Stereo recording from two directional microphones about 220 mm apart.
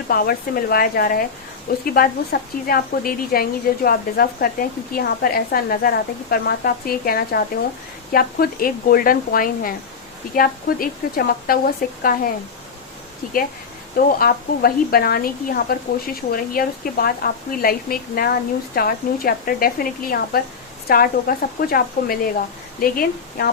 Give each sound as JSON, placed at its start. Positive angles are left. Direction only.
{"t": 0.1, "sound": "a woman's voice", "side_deg": 40}